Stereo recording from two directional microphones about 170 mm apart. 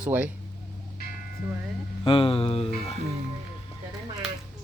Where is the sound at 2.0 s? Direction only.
30° left (ahead or behind).